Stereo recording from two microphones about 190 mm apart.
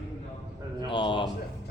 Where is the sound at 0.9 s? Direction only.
25° left (ahead or behind).